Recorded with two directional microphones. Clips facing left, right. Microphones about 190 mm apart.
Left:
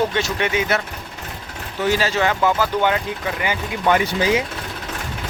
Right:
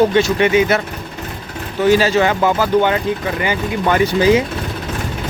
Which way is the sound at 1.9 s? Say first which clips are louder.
Right 6 dB; 10° right (ahead or behind).